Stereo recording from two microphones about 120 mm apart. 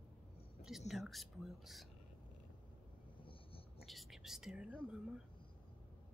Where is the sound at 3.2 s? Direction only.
45° left (ahead or behind).